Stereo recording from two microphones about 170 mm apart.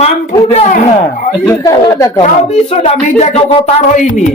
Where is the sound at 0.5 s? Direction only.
40° left (ahead or behind).